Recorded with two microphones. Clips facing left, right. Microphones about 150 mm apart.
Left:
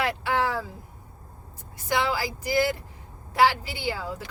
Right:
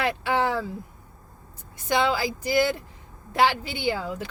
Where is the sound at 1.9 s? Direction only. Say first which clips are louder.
Right 3 dB; 25° right (ahead or behind).